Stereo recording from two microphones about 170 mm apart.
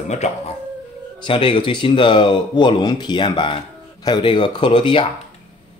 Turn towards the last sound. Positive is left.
turn(degrees=30)  # may be behind; listen again after turning